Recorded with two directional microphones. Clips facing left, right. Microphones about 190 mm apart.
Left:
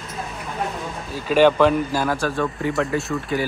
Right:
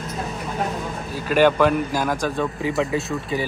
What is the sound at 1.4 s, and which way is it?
Speech, 10° right (ahead or behind).